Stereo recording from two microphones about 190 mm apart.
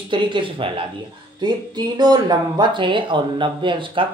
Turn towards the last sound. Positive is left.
turn(degrees=-25)  # may be behind; listen again after turning